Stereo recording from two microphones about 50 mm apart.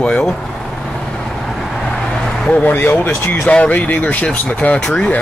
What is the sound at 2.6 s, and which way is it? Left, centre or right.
Speech, left.